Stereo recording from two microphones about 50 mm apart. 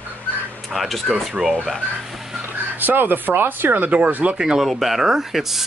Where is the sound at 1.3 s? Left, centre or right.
Centre.